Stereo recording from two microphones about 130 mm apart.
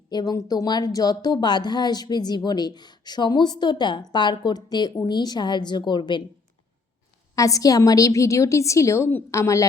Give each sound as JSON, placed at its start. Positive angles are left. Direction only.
{"t": 0.1, "sound": "speech", "side_deg": 30}
{"t": 7.3, "sound": "a woman's voice", "side_deg": 25}